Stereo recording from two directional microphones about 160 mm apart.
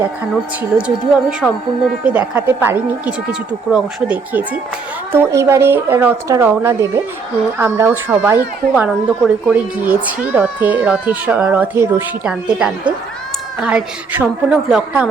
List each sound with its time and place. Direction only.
0.8 s speech: 5° right (ahead or behind)